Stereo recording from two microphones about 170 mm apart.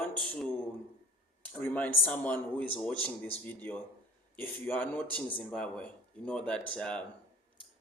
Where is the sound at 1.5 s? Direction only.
10° left (ahead or behind).